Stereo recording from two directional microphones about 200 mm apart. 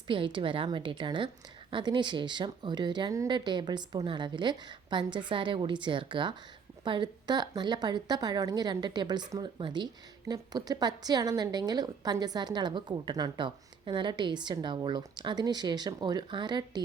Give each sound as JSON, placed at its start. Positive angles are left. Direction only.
{"t": 0.1, "sound": "speech", "side_deg": -25}